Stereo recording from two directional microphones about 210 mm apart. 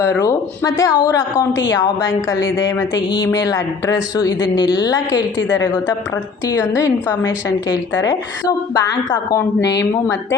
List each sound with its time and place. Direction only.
0.1 s a woman's voice: 15° left (ahead or behind)
4.9 s a woman's voice: 60° left (ahead or behind)
6.5 s speech: 10° left (ahead or behind)
9.6 s speech: 15° left (ahead or behind)